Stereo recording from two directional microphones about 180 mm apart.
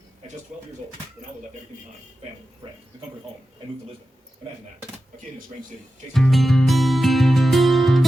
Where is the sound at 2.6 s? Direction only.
30° right (ahead or behind).